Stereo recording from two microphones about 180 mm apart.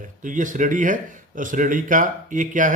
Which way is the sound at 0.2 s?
45° right (ahead or behind).